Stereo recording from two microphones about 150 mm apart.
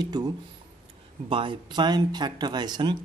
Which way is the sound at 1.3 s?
35° right (ahead or behind).